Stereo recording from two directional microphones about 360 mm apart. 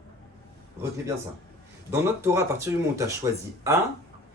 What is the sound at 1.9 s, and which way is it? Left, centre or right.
Speech, centre.